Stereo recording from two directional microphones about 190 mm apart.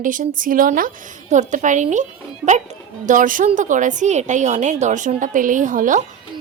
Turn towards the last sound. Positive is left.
turn(degrees=-45)  # may be behind; listen again after turning